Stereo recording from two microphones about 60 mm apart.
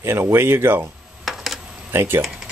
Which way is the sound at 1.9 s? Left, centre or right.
Right.